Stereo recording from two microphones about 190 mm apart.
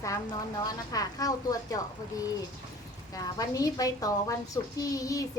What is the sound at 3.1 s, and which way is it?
A child's voice, 20° left (ahead or behind).